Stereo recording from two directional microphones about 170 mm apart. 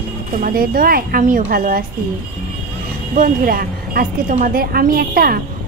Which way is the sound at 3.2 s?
60° right (ahead or behind).